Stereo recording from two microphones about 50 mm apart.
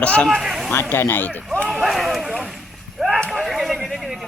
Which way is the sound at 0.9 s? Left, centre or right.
Left.